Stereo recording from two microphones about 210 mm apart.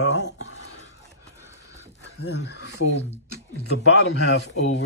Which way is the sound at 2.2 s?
55° left (ahead or behind).